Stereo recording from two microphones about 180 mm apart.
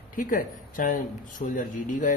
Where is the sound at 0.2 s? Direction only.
50° left (ahead or behind).